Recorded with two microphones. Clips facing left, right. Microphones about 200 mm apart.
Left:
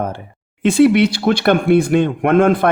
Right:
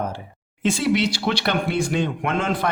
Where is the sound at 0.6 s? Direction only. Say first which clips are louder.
Left 9 dB; 60° left (ahead or behind).